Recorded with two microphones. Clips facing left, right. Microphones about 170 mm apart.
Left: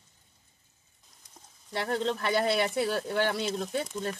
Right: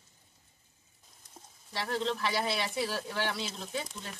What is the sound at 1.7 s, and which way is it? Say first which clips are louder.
Speech: left 3 dB; 55° left (ahead or behind).